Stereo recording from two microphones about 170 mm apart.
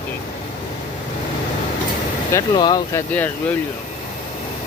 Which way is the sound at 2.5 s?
25° left (ahead or behind).